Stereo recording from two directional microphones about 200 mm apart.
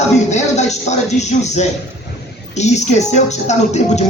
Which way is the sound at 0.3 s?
35° left (ahead or behind).